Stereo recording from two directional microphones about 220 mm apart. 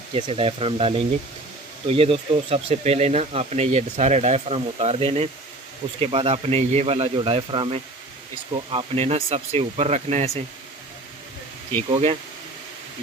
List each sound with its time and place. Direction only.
0.1 s speech: 25° right (ahead or behind)
11.9 s speech: 25° right (ahead or behind)